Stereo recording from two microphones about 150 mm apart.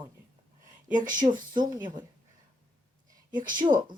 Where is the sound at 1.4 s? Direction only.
30° right (ahead or behind).